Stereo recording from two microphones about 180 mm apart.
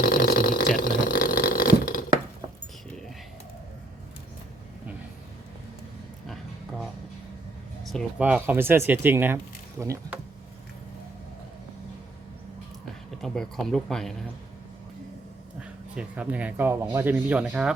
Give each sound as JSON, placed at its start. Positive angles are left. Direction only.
{"t": 0.0, "sound": "vehicle", "side_deg": 55}
{"t": 6.2, "sound": "a sound", "side_deg": 0}
{"t": 8.2, "sound": "speech", "side_deg": -10}
{"t": 13.2, "sound": "speech", "side_deg": 0}
{"t": 15.6, "sound": "speech", "side_deg": -5}